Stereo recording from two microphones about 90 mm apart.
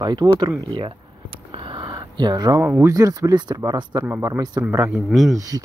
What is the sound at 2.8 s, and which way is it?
Speech, 40° right (ahead or behind).